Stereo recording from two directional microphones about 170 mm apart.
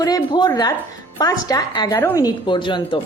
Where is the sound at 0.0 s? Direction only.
20° left (ahead or behind).